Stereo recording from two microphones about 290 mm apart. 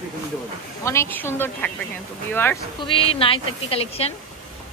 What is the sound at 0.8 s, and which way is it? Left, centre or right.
Speech, centre.